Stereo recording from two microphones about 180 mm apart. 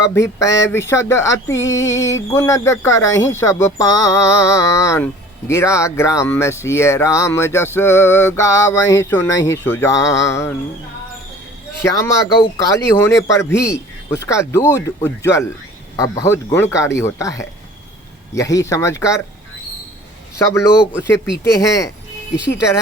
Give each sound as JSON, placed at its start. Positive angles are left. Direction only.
{"t": 0.0, "sound": "speech", "side_deg": 15}
{"t": 11.8, "sound": "speech", "side_deg": 15}
{"t": 21.1, "sound": "speech", "side_deg": 15}